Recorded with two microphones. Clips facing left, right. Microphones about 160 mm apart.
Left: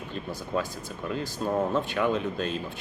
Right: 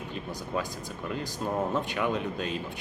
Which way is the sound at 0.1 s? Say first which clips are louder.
Left 3 dB; 15° right (ahead or behind).